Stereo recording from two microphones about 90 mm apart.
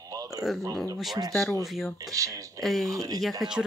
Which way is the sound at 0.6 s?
45° right (ahead or behind).